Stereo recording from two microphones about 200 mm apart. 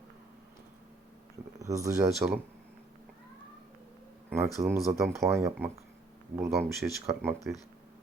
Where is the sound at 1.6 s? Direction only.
15° right (ahead or behind).